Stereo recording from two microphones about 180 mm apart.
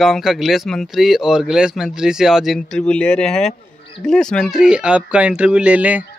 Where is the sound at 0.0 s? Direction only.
Centre (ahead or behind).